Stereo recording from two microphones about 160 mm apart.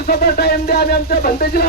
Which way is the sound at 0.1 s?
75° left (ahead or behind).